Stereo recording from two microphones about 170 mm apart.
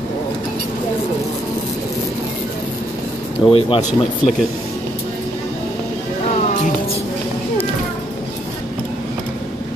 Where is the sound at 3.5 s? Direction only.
35° left (ahead or behind).